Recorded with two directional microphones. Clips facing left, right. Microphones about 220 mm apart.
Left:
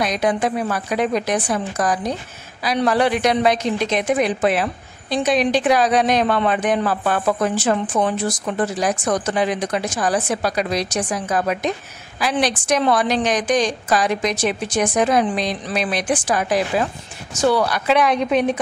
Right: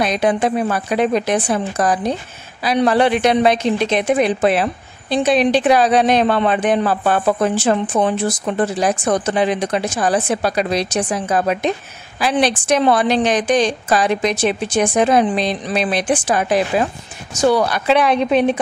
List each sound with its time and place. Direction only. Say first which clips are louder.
0.0 s a woman's voice: right 3 dB; 25° right (ahead or behind)